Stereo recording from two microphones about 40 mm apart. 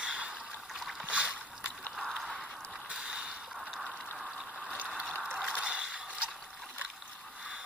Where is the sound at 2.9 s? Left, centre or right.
Centre.